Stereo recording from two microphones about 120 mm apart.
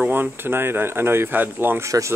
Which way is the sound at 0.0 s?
15° right (ahead or behind).